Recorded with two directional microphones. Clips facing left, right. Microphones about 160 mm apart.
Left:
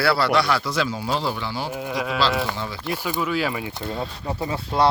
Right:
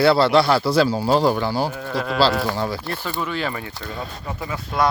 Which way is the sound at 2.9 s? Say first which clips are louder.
Left 2 dB; 10° left (ahead or behind).